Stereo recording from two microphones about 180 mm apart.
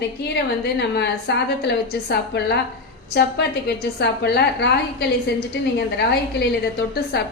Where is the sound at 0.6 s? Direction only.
70° left (ahead or behind).